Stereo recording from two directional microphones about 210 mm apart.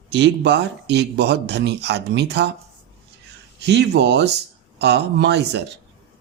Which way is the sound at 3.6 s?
55° right (ahead or behind).